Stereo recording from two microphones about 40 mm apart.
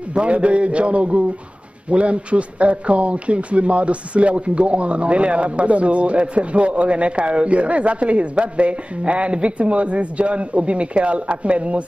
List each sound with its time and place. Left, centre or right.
0.1 s a man's voice: right